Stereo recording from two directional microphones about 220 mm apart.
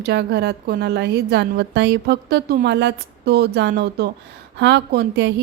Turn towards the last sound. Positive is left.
turn(degrees=-50)  # may be behind; listen again after turning